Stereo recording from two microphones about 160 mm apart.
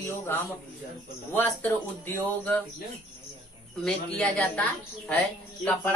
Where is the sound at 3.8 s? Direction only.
5° left (ahead or behind).